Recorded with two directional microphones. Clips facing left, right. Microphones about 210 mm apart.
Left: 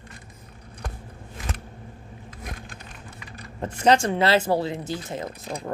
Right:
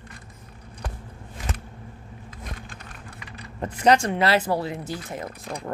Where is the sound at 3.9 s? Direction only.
25° left (ahead or behind).